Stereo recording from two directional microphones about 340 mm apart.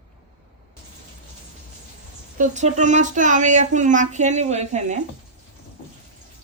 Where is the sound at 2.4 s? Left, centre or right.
Right.